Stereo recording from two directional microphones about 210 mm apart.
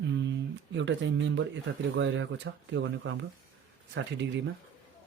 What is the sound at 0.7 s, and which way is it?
Speech, 60° right (ahead or behind).